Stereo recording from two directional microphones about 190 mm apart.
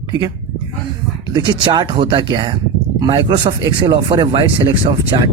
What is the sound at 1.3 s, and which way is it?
Speech, 25° right (ahead or behind).